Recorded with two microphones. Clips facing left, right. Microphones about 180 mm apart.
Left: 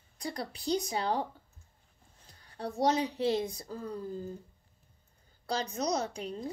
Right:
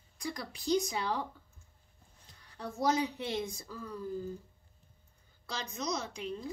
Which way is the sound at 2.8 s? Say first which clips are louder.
Left 3 dB; 30° left (ahead or behind).